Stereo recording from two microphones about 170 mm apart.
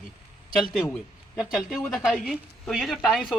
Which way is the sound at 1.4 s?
Centre (ahead or behind).